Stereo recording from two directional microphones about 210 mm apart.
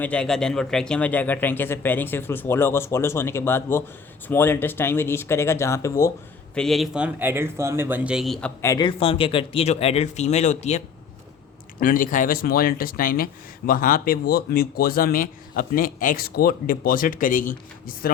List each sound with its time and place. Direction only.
0.0 s speech: 5° left (ahead or behind)
6.5 s speech: centre (ahead or behind); by 18.1 s 40° left (ahead or behind)